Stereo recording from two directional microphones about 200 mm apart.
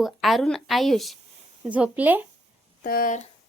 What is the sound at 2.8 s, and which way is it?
Speech, 45° left (ahead or behind).